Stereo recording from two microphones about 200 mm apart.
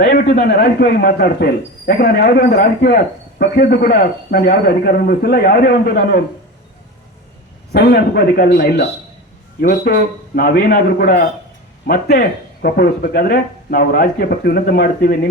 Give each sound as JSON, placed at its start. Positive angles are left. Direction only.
{"t": 0.3, "sound": "a man's voice", "side_deg": 50}
{"t": 7.7, "sound": "a man's voice", "side_deg": 50}